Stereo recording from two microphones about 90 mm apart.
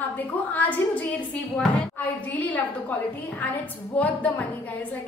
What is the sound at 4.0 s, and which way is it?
Speech, 15° left (ahead or behind).